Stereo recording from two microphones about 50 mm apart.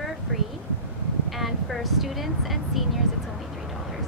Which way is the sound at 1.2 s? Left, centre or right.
Centre.